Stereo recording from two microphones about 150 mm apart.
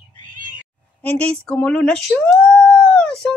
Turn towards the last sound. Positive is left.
turn(degrees=5)  # may be behind; listen again after turning